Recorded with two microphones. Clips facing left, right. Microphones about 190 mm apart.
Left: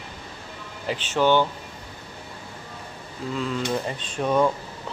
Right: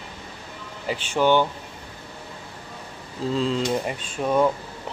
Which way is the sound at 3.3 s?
25° right (ahead or behind).